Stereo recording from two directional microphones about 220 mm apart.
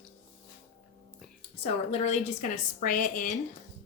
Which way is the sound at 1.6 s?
30° left (ahead or behind).